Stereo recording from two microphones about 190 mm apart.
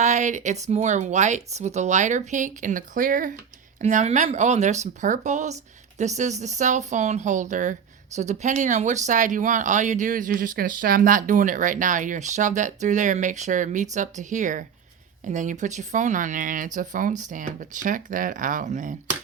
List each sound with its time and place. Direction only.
0.0 s speech: 40° right (ahead or behind)